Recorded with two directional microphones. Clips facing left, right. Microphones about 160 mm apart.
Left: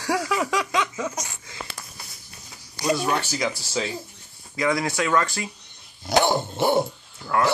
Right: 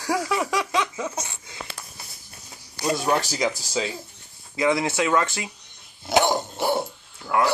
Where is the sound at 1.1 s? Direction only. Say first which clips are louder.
Right 1 dB; 30° right (ahead or behind).